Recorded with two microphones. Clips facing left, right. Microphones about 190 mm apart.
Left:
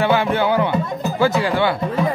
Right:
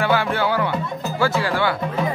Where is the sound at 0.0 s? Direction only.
20° left (ahead or behind).